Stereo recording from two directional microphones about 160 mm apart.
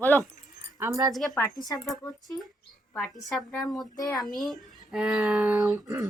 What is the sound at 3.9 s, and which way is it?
Speech, 25° left (ahead or behind).